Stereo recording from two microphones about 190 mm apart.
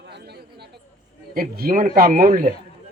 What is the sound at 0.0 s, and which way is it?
Chatter, 60° right (ahead or behind).